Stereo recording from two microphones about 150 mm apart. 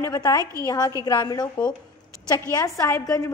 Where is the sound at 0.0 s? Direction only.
25° left (ahead or behind).